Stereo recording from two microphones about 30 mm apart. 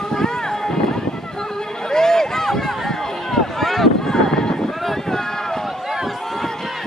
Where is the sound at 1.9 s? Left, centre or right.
Centre.